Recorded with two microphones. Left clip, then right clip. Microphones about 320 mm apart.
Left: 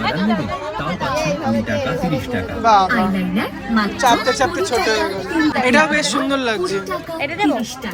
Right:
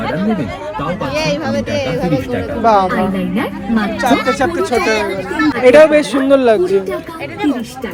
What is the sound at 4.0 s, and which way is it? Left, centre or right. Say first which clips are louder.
Speech: right 1 dB; centre.